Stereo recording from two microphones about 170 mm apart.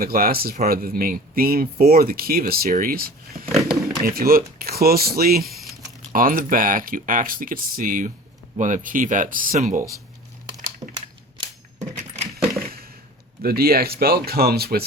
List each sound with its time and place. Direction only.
0.0 s speech: 60° right (ahead or behind)
5.5 s a sound: centre (ahead or behind)
6.1 s speech: 55° right (ahead or behind)
13.4 s speech: 65° right (ahead or behind)